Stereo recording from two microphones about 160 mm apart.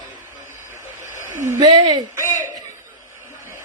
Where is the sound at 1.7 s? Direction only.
30° right (ahead or behind).